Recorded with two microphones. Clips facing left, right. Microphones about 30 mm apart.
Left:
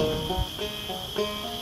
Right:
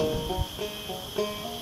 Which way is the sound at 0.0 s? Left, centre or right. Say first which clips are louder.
Left 1 dB; centre.